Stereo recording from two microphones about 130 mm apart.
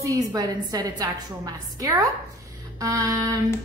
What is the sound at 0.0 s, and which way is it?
A woman's voice, 25° right (ahead or behind).